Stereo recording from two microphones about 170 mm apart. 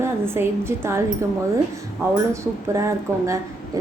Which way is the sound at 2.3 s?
15° right (ahead or behind).